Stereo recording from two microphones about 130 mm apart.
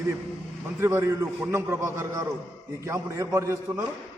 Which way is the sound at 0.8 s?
20° right (ahead or behind).